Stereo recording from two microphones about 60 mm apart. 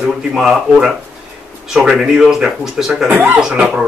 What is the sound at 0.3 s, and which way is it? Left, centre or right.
A man's voice, centre.